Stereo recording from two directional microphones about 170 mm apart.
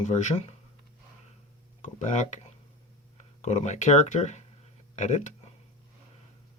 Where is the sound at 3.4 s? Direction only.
40° left (ahead or behind).